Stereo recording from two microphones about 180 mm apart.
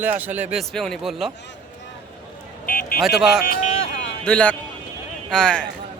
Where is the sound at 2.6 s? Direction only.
50° left (ahead or behind).